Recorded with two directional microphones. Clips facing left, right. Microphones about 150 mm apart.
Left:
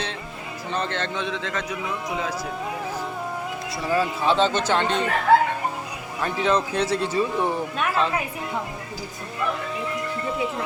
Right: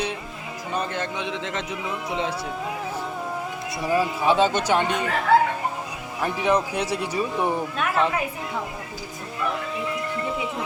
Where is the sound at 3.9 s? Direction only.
15° right (ahead or behind).